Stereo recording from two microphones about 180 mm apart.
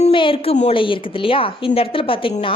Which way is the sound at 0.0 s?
30° left (ahead or behind).